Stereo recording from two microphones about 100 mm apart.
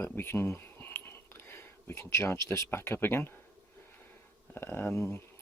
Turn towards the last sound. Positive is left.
turn(degrees=25)  # may be behind; listen again after turning